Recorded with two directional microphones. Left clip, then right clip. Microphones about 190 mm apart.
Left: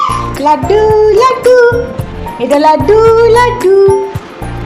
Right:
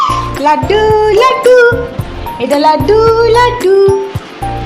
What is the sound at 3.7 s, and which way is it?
Music, 10° left (ahead or behind).